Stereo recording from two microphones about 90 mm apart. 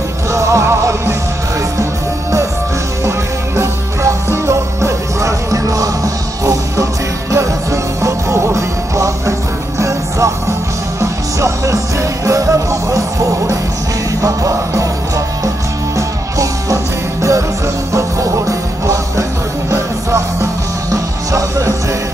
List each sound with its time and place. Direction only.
0.3 s music: 35° right (ahead or behind)
3.1 s music: 30° right (ahead or behind)